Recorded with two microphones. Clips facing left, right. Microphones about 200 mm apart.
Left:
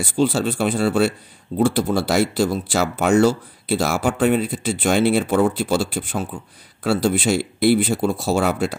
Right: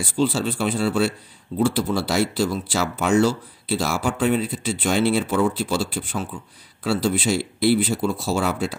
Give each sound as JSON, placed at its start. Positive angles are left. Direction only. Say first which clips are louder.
{"t": 0.1, "sound": "speech", "louder": "left 3 dB", "side_deg": 50}